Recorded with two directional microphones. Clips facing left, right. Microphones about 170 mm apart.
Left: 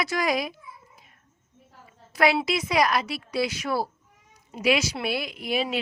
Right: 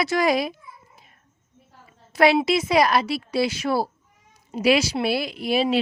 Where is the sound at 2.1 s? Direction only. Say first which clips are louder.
Right 5 dB; 30° right (ahead or behind).